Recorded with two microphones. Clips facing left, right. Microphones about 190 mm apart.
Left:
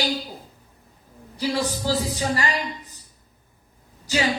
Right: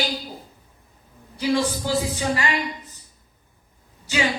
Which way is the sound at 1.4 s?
40° left (ahead or behind).